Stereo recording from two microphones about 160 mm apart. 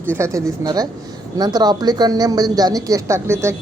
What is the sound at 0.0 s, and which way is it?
Speech, 15° right (ahead or behind).